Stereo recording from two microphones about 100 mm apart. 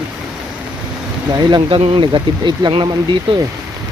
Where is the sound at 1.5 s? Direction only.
55° right (ahead or behind).